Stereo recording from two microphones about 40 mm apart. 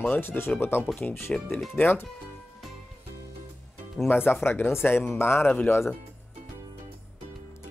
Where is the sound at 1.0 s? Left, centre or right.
Left.